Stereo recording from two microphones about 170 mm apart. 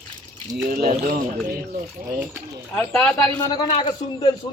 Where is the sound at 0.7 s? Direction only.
55° right (ahead or behind).